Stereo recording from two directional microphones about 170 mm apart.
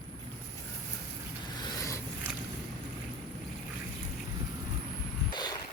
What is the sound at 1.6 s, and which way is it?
Vehicle, 20° left (ahead or behind).